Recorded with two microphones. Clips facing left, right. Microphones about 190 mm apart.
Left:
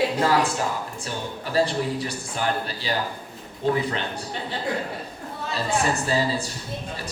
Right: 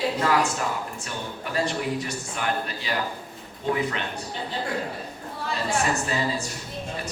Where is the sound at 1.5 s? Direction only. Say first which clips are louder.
Left 3 dB; 35° left (ahead or behind).